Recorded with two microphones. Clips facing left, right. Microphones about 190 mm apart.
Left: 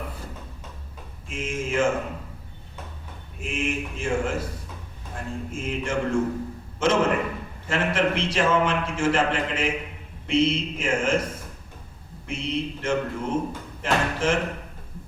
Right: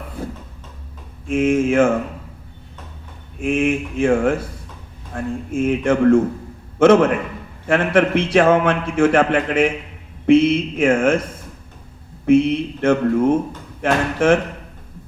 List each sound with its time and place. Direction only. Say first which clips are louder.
1.3 s a man's voice: right 13 dB; 55° right (ahead or behind)
3.4 s a man's voice: right 10 dB; 55° right (ahead or behind)
12.2 s a man's voice: right 14 dB; 55° right (ahead or behind)